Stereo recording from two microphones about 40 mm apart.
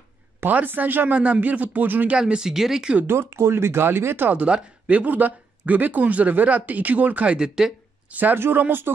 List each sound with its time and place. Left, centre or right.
0.5 s speech: right
1.1 s speech: right
2.1 s speech: centre
3.1 s speech: right
4.5 s speech: right
5.0 s speech: right
7.3 s speech: centre
8.1 s speech: right
8.4 s speech: right